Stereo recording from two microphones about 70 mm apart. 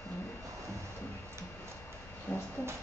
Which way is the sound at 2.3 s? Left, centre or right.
Centre.